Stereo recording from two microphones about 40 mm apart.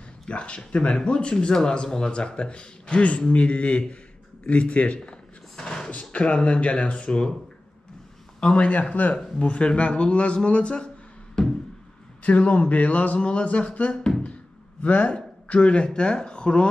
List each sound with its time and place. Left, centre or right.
0.3 s speech: left
5.0 s a sound: centre
5.9 s speech: left
8.4 s speech: left
11.4 s a sound: centre
12.2 s a man's voice: left